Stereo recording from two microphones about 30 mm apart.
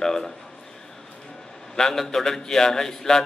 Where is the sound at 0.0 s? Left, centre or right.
Centre.